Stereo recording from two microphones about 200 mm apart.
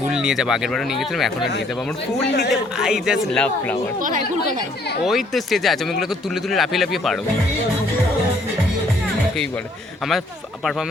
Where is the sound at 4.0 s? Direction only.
40° right (ahead or behind).